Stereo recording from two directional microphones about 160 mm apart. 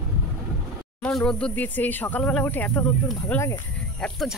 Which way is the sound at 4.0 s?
Centre (ahead or behind).